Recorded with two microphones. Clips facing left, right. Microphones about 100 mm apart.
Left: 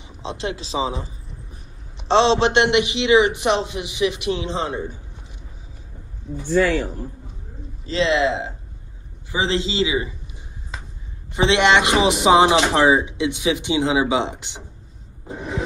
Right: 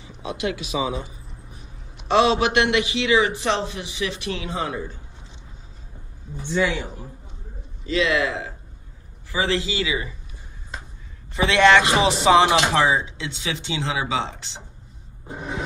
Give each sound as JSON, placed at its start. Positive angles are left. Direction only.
{"t": 0.2, "sound": "speech", "side_deg": 25}
{"t": 6.4, "sound": "a man's voice", "side_deg": -5}
{"t": 7.8, "sound": "speech", "side_deg": 30}
{"t": 11.2, "sound": "speech", "side_deg": 20}